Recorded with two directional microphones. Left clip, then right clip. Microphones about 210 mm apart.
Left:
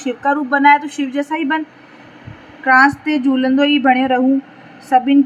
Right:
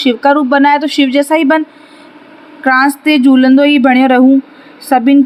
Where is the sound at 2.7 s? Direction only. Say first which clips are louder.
Right 2 dB; 40° right (ahead or behind).